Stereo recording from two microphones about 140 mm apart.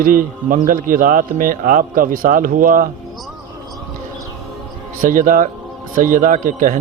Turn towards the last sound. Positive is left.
turn(degrees=-70)  # may be behind; listen again after turning